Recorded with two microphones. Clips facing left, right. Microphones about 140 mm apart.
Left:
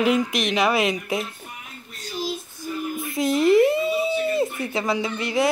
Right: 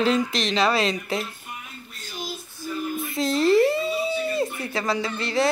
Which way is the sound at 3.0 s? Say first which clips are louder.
Left 2 dB; 20° left (ahead or behind).